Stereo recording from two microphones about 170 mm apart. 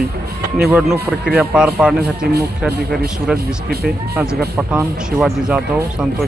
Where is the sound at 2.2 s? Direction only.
65° right (ahead or behind).